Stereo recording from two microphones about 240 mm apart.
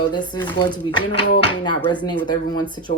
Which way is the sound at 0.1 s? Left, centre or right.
Centre.